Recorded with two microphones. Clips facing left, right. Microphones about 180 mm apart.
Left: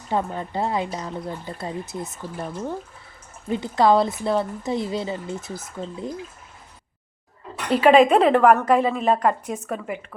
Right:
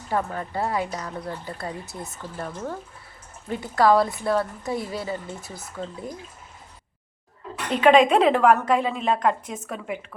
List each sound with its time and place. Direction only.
0.1 s speech: 20° left (ahead or behind)
7.8 s a woman's voice: 5° left (ahead or behind)